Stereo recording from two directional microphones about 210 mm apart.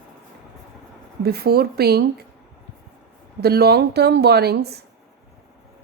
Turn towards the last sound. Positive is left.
turn(degrees=-50)  # may be behind; listen again after turning